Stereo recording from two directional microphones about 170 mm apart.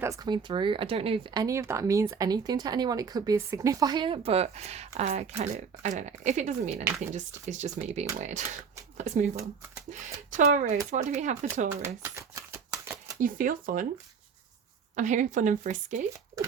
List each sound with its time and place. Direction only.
0.0 s speech: 20° right (ahead or behind); by 11.3 s 45° right (ahead or behind)
11.8 s a sound: 15° right (ahead or behind)
13.1 s speech: 55° right (ahead or behind)
14.9 s speech: 45° right (ahead or behind)